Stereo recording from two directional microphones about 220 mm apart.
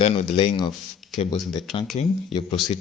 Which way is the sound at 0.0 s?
30° left (ahead or behind).